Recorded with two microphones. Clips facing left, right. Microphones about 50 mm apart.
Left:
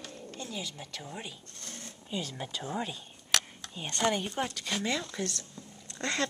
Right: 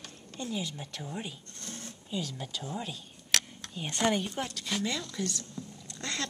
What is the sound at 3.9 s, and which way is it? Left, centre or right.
Speech, centre.